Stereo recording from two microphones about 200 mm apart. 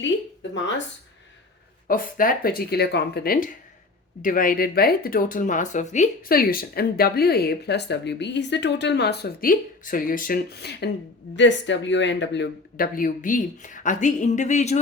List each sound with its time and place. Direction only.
1.9 s speech: 45° left (ahead or behind)